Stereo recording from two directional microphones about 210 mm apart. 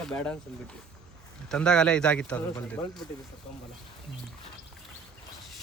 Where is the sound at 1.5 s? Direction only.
5° left (ahead or behind).